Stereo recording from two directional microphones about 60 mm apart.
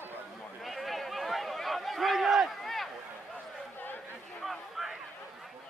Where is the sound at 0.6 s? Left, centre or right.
Centre.